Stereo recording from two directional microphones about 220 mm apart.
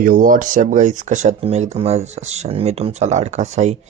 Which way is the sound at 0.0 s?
35° right (ahead or behind).